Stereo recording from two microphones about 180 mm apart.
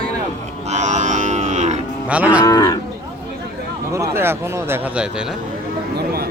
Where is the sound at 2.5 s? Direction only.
20° left (ahead or behind).